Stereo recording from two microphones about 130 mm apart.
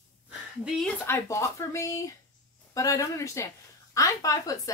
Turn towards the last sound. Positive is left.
turn(degrees=25)  # may be behind; listen again after turning